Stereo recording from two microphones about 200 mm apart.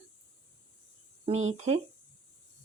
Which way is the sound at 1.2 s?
35° right (ahead or behind).